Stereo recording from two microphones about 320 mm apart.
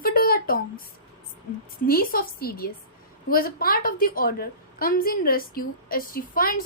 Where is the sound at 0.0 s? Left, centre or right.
Left.